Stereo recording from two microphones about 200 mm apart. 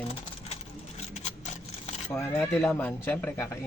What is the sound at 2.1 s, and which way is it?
Speech, 10° left (ahead or behind).